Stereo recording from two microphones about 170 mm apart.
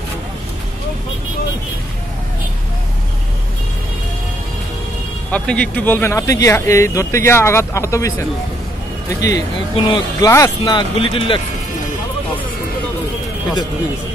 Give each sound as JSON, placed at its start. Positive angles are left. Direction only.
{"t": 5.3, "sound": "speech", "side_deg": 10}